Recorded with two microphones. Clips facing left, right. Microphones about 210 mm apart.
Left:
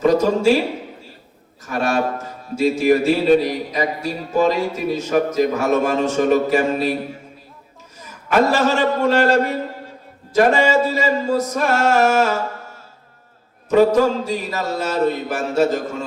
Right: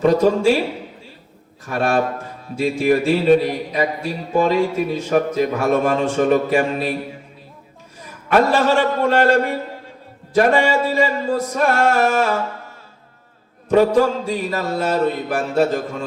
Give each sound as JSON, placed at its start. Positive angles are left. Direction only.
{"t": 0.1, "sound": "speech", "side_deg": 45}
{"t": 1.6, "sound": "a man's voice", "side_deg": 40}
{"t": 8.4, "sound": "speech", "side_deg": 45}
{"t": 10.3, "sound": "music", "side_deg": 40}
{"t": 13.9, "sound": "a man's voice", "side_deg": 40}